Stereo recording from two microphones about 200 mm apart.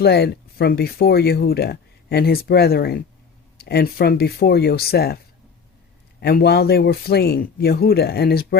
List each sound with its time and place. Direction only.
0.0 s speech: 50° left (ahead or behind)